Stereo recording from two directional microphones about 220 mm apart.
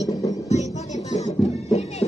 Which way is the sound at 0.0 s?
30° left (ahead or behind).